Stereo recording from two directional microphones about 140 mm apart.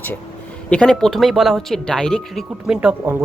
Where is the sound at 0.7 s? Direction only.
5° left (ahead or behind).